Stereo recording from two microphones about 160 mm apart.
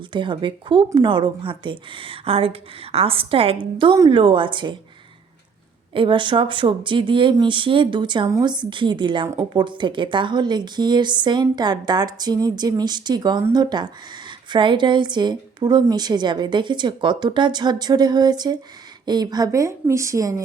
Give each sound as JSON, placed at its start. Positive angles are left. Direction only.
{"t": 0.1, "sound": "speech", "side_deg": -30}
{"t": 5.9, "sound": "speech", "side_deg": -30}